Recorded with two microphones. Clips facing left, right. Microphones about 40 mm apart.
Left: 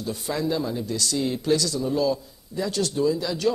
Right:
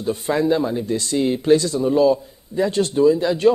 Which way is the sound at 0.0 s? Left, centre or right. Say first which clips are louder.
Right 7 dB; right.